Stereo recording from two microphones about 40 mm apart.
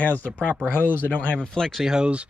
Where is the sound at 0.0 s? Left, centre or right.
Left.